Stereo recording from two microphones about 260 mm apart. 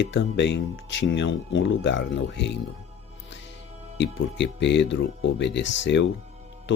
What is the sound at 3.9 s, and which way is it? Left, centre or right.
Speech, left.